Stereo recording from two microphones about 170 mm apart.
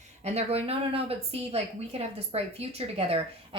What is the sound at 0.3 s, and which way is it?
A woman's voice, 35° right (ahead or behind).